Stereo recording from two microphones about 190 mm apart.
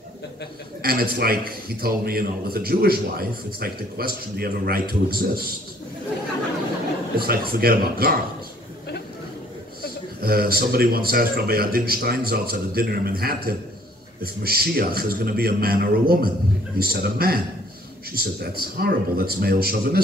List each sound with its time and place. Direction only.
0.8 s a man's voice: 50° right (ahead or behind)
7.2 s a man's voice: 50° right (ahead or behind)
10.2 s a man's voice: 50° right (ahead or behind)